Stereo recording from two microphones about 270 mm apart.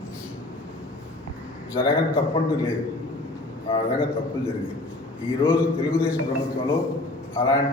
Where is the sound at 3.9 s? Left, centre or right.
Centre.